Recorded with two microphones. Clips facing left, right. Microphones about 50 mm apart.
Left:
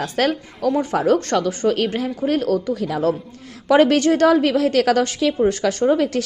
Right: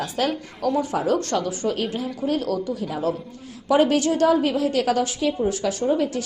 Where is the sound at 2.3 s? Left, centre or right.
Left.